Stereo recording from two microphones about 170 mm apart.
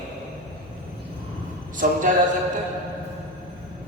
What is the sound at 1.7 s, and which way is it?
Speech, 50° right (ahead or behind).